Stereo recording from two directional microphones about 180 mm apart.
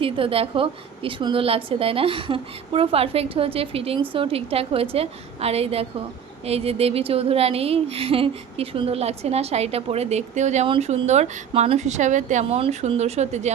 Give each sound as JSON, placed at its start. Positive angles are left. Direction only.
{"t": 0.0, "sound": "speech", "side_deg": -30}